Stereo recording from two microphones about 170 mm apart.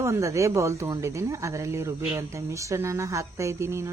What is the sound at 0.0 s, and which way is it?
Speech, 15° right (ahead or behind).